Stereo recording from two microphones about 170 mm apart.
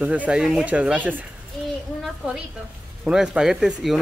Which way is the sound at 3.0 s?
5° right (ahead or behind).